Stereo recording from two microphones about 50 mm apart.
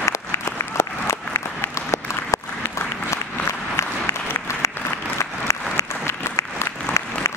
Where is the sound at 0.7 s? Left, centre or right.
Left.